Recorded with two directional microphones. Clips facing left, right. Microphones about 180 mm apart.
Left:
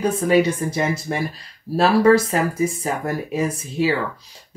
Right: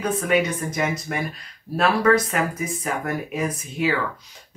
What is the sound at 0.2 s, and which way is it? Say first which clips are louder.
Speech: left 6 dB; 30° left (ahead or behind).